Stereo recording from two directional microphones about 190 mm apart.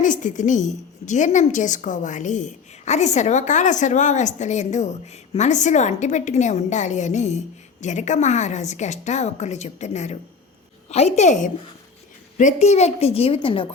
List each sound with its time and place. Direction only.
0.0 s a woman's voice: 40° left (ahead or behind)